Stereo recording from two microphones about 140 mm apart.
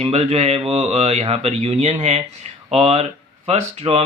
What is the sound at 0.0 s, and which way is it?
Speech, 50° right (ahead or behind).